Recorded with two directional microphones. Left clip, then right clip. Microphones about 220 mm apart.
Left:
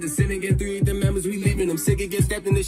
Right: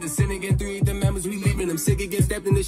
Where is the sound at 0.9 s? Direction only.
35° right (ahead or behind).